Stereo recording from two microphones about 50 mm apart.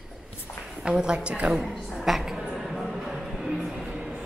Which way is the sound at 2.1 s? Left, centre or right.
Centre.